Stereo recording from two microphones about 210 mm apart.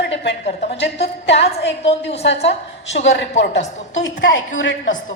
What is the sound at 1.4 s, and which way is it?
Speech, 55° left (ahead or behind).